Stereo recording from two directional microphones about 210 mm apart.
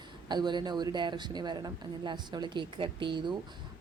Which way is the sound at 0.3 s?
20° right (ahead or behind).